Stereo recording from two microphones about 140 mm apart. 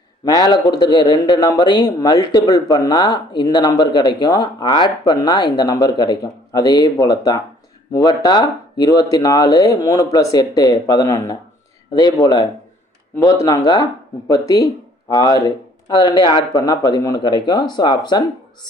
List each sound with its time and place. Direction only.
0.3 s speech: 30° left (ahead or behind)